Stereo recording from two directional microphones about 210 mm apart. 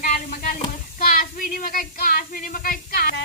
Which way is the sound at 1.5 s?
40° left (ahead or behind).